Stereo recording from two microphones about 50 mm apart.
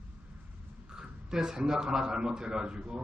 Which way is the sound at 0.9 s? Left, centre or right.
Centre.